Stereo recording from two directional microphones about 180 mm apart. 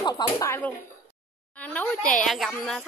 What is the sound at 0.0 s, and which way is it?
A woman's voice, 20° left (ahead or behind).